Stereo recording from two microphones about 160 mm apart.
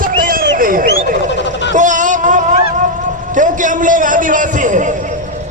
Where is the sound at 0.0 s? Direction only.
60° right (ahead or behind).